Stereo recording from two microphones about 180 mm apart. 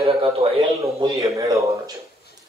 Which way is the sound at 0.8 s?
15° right (ahead or behind).